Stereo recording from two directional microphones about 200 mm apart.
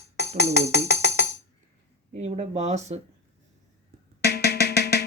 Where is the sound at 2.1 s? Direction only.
35° right (ahead or behind).